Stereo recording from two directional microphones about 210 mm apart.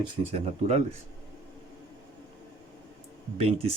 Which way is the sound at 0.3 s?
30° right (ahead or behind).